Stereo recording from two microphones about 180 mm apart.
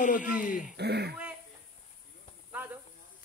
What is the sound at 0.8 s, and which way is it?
Speech, 65° right (ahead or behind).